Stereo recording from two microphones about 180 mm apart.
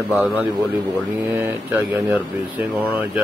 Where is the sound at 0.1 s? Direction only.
5° right (ahead or behind).